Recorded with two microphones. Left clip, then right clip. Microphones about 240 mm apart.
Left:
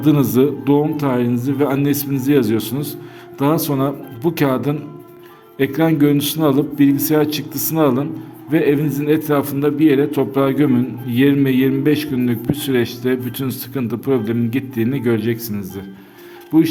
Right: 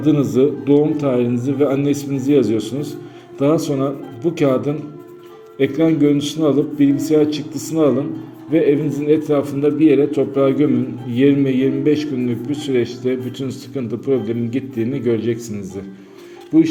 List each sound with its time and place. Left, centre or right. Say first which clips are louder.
0.0 s a man's voice: even; left